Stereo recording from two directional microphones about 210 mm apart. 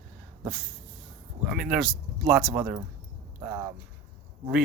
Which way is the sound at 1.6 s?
Centre (ahead or behind).